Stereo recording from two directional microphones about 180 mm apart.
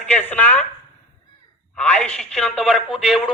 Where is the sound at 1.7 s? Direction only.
5° left (ahead or behind).